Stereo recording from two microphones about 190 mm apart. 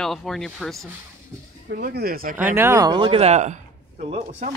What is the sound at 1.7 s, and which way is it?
Speech, 55° right (ahead or behind).